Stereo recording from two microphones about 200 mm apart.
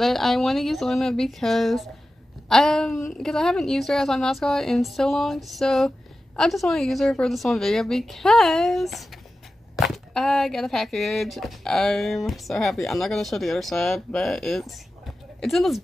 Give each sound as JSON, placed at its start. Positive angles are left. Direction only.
{"t": 0.0, "sound": "speech", "side_deg": 0}